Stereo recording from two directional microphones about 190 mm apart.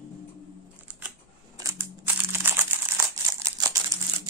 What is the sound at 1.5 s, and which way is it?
Crumpling, 15° right (ahead or behind).